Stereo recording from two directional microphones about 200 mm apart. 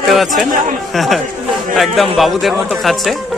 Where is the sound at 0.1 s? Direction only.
Centre (ahead or behind).